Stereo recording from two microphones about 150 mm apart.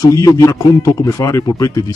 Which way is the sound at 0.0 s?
20° left (ahead or behind).